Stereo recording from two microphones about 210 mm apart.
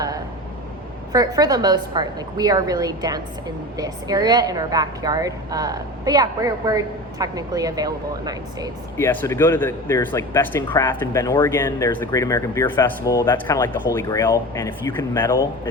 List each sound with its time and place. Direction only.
1.1 s a woman's voice: 20° right (ahead or behind)
9.0 s speech: 10° left (ahead or behind)